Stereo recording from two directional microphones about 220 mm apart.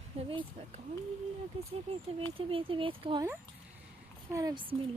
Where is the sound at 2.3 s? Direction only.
25° right (ahead or behind).